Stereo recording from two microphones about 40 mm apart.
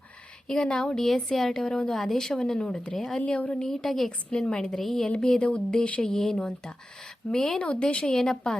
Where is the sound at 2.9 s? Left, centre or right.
Centre.